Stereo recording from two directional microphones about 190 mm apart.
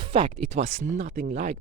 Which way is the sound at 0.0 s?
30° right (ahead or behind).